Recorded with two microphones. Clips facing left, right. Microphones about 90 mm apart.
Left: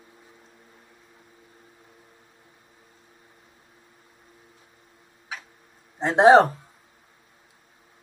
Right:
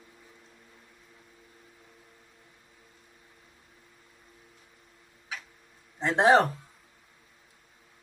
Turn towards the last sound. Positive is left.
turn(degrees=30)  # may be behind; listen again after turning